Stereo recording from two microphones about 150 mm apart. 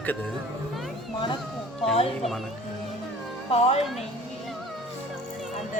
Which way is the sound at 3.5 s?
45° left (ahead or behind).